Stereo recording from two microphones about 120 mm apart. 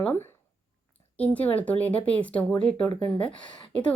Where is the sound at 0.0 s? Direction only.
20° left (ahead or behind).